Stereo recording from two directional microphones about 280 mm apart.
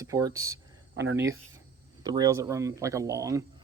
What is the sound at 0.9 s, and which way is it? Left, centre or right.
Speech, right.